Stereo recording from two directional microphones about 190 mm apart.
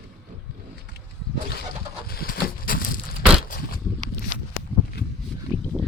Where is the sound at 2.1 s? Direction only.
50° left (ahead or behind).